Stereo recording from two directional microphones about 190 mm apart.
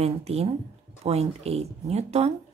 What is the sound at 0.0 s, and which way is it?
Speech, 35° right (ahead or behind).